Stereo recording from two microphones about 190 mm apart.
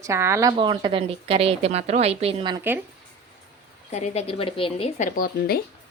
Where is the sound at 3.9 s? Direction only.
35° left (ahead or behind); by 5.6 s 50° left (ahead or behind).